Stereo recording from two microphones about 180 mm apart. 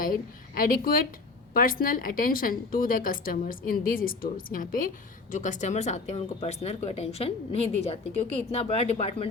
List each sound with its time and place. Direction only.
0.0 s a woman's voice: 50° left (ahead or behind); by 9.2 s 35° left (ahead or behind)